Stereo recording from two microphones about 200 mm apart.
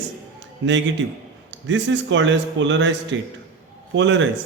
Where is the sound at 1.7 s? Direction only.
65° right (ahead or behind).